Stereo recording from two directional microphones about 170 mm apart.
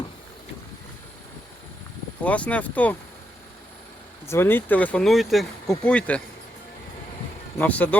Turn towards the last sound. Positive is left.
turn(degrees=10)  # may be behind; listen again after turning